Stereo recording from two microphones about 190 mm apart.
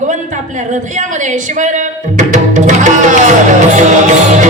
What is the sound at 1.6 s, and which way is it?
Music, 40° right (ahead or behind).